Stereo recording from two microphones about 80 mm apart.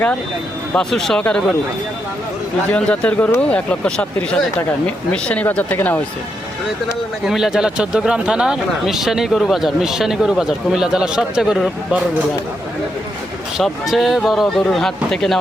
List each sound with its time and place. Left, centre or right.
0.7 s speech: centre
2.7 s speech: centre
7.3 s speech: centre
13.6 s speech: centre